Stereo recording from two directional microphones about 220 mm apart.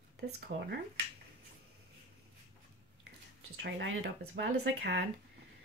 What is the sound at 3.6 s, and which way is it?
Speech, 50° right (ahead or behind).